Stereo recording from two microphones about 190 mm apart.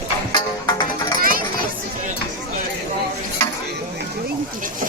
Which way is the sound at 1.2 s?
50° right (ahead or behind).